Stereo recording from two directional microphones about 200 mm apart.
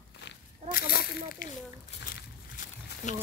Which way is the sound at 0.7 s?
50° left (ahead or behind).